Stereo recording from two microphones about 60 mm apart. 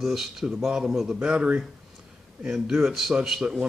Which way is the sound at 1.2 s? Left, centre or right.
Right.